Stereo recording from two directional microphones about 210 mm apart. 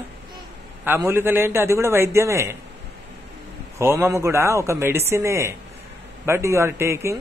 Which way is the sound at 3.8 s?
10° right (ahead or behind).